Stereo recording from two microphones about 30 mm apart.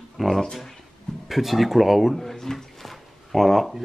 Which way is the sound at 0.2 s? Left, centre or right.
Centre.